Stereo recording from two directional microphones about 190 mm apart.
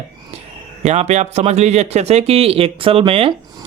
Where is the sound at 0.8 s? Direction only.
35° right (ahead or behind).